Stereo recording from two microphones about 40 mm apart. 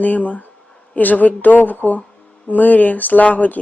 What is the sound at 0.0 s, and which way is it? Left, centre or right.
Speech, left.